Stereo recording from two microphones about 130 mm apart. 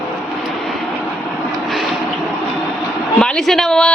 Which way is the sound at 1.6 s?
Centre (ahead or behind).